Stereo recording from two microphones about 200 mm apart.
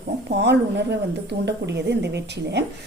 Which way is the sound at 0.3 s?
60° right (ahead or behind).